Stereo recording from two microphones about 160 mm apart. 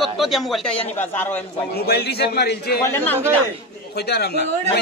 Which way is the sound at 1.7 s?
85° left.